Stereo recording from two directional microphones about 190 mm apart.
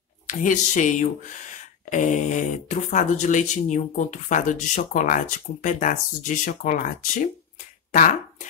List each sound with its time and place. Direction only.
0.3 s speech: 40° left (ahead or behind)